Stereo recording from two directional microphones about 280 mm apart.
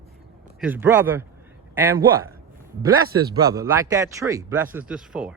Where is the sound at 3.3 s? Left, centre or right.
Centre.